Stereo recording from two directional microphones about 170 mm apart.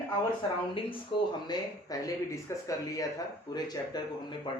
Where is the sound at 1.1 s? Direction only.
30° left (ahead or behind).